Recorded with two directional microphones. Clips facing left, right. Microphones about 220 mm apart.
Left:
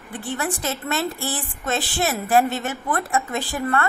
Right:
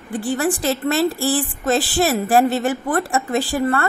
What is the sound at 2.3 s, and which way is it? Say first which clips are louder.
A woman's voice: right 4 dB; 35° right (ahead or behind).